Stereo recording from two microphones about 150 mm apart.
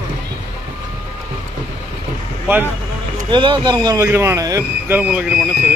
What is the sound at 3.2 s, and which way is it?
Speech, 30° right (ahead or behind).